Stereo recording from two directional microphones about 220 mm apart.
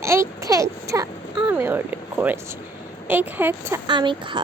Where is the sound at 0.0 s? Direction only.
10° right (ahead or behind).